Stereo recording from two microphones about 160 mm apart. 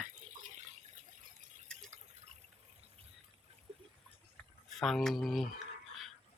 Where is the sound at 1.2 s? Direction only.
55° right (ahead or behind).